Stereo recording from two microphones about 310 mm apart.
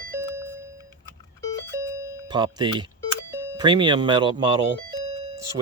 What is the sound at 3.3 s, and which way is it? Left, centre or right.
Speech, centre.